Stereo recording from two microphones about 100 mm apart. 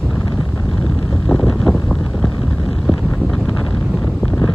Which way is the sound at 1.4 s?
5° left (ahead or behind).